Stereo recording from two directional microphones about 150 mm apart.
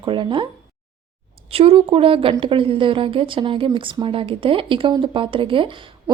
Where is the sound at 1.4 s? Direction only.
40° right (ahead or behind).